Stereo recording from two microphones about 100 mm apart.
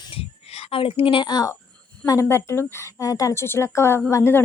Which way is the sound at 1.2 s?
45° left (ahead or behind).